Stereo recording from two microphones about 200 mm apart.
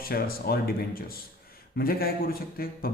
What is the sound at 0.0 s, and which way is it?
A man's voice, 50° left (ahead or behind).